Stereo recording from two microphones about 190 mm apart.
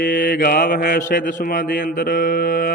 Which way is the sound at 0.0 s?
45° left (ahead or behind).